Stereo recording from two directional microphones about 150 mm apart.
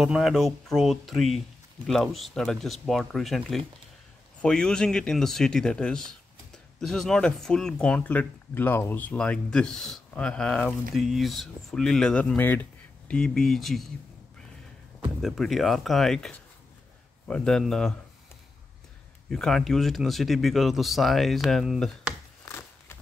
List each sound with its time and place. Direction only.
0.0 s speech: centre (ahead or behind)
15.2 s speech: centre (ahead or behind)
19.3 s speech: 5° left (ahead or behind)
22.4 s a sound: 15° left (ahead or behind)